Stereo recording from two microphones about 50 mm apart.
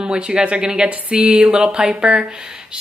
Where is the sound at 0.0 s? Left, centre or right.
Centre.